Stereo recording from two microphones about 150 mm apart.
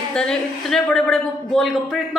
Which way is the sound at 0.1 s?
5° left (ahead or behind).